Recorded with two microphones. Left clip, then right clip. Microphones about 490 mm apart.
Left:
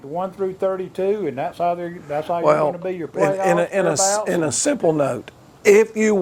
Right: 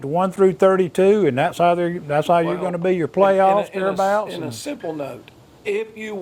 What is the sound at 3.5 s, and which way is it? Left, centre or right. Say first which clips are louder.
Speech: left 2 dB; left.